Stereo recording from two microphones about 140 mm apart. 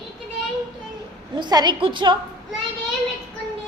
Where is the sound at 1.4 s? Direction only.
30° right (ahead or behind).